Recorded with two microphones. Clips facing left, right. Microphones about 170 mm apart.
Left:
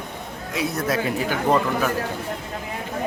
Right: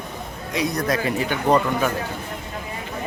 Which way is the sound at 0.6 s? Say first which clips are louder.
Right 1 dB; 5° left (ahead or behind).